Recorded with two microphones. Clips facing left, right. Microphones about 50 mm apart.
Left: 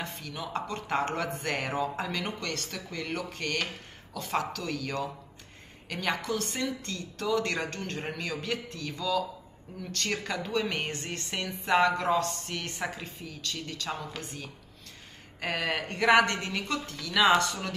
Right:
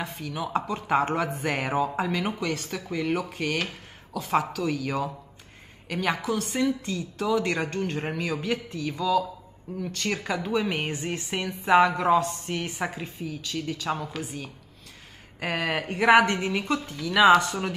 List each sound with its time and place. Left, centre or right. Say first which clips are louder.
0.0 s speech: right 5 dB; centre